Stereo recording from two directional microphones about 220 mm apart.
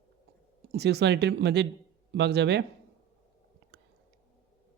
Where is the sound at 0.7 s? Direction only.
50° right (ahead or behind).